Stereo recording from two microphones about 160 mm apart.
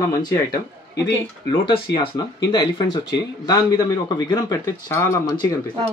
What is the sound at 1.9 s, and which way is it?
Speech, 25° left (ahead or behind).